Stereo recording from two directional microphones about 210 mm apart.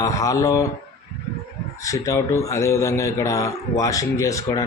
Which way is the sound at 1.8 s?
15° left (ahead or behind).